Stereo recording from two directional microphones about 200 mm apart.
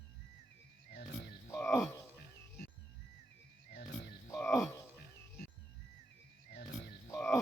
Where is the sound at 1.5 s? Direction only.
10° left (ahead or behind).